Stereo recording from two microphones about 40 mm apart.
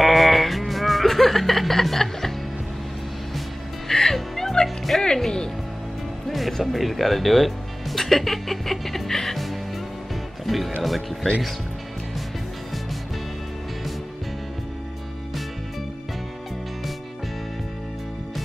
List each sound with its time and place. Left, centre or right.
0.0 s music: centre
3.9 s music: centre
6.2 s speech: centre